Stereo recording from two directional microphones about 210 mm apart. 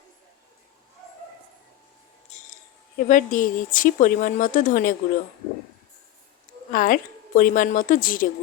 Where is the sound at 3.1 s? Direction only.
40° left (ahead or behind).